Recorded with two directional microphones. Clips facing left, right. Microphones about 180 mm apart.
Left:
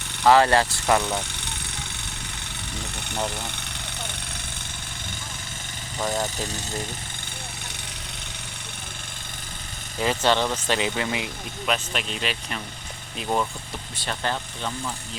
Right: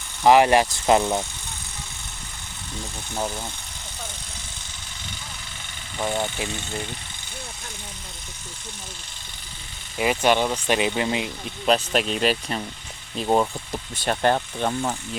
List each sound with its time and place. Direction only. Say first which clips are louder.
0.3 s speech: right 2 dB; 15° right (ahead or behind)
6.0 s speech: right 1 dB; centre (ahead or behind)
6.2 s speech: right 1 dB; 40° left (ahead or behind)
10.0 s speech: right 2 dB; 15° right (ahead or behind); by 13.5 s 30° right (ahead or behind)
14.0 s speech: right 8 dB; 45° right (ahead or behind)